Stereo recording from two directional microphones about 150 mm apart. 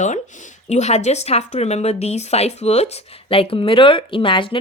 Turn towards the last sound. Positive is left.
turn(degrees=35)  # may be behind; listen again after turning